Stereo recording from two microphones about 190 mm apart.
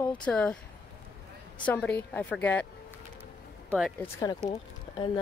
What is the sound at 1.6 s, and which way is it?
Speech, 5° left (ahead or behind).